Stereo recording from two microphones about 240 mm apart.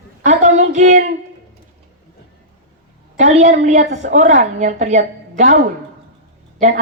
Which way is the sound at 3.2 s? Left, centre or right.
Right.